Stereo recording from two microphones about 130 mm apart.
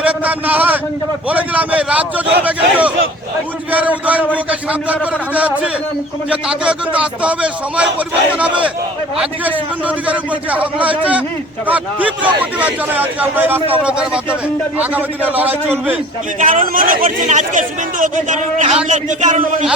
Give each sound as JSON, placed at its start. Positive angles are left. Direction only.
{"t": 0.0, "sound": "a man's voice", "side_deg": -10}
{"t": 16.4, "sound": "a man's voice", "side_deg": -90}